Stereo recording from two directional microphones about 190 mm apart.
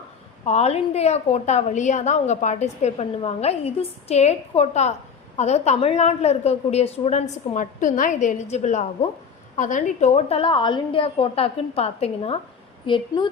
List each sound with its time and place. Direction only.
0.4 s a woman's voice: 35° left (ahead or behind)